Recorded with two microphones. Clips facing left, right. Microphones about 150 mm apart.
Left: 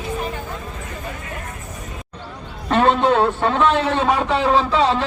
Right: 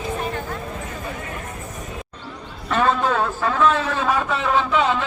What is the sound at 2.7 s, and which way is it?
A man's voice, 30° left (ahead or behind).